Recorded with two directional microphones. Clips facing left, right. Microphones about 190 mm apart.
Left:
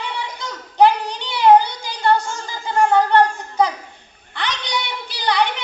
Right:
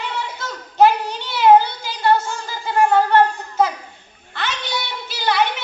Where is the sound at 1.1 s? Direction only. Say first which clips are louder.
Even; 15° left (ahead or behind).